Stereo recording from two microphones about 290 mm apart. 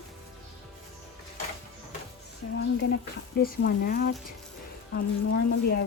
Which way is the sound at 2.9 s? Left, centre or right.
Left.